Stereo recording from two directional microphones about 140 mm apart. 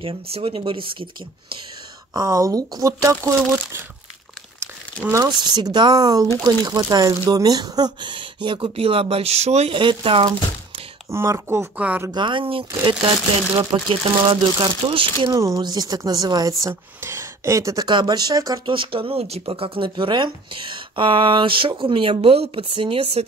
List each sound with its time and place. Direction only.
0.0 s speech: 40° right (ahead or behind)
2.1 s speech: 25° right (ahead or behind)
5.1 s speech: 30° right (ahead or behind); by 9.8 s 50° right (ahead or behind)
9.8 s speech: 35° right (ahead or behind)
11.1 s speech: 20° right (ahead or behind)
12.1 s speech: 35° right (ahead or behind)
15.3 s speech: 25° right (ahead or behind); by 23.2 s 40° right (ahead or behind)